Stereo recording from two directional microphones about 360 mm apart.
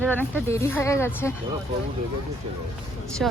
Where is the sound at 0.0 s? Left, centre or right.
Centre.